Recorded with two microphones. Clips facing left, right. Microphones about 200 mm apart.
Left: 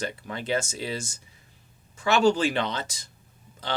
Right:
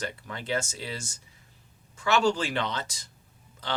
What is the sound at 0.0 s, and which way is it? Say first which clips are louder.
Speech: left 4 dB; 20° left (ahead or behind).